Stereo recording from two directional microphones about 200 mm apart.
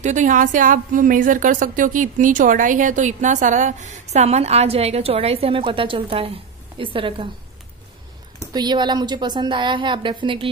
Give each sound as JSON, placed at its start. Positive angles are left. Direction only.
{"t": 0.0, "sound": "a woman's voice", "side_deg": -35}
{"t": 8.5, "sound": "a woman's voice", "side_deg": -20}